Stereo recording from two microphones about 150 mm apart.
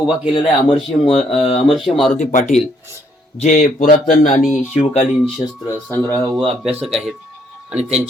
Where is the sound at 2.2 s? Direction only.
55° left (ahead or behind).